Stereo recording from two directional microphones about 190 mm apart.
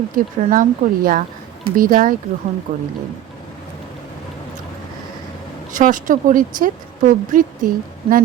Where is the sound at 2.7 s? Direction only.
35° right (ahead or behind).